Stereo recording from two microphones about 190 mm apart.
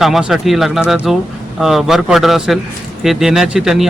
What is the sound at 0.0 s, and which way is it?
A man's voice, centre (ahead or behind).